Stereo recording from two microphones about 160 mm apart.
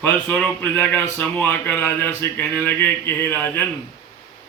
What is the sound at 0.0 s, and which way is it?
A man's voice, 10° left (ahead or behind).